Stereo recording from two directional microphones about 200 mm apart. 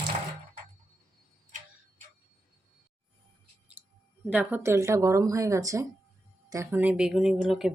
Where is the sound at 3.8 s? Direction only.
10° right (ahead or behind).